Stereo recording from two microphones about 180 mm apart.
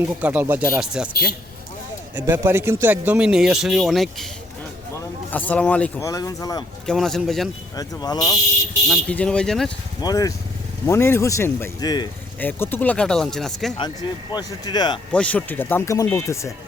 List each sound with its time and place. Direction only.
0.0 s speech: 10° right (ahead or behind)
2.1 s speech: 10° right (ahead or behind)
5.3 s speech: 10° left (ahead or behind)
6.0 s speech: 20° left (ahead or behind)
6.8 s speech: centre (ahead or behind)
7.8 s speech: 20° left (ahead or behind)
8.9 s speech: 5° left (ahead or behind)
10.0 s speech: 20° left (ahead or behind)
12.4 s speech: 10° left (ahead or behind)
14.3 s speech: 25° left (ahead or behind)
15.1 s speech: 5° left (ahead or behind)